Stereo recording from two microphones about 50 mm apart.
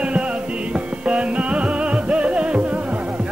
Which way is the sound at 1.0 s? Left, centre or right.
Right.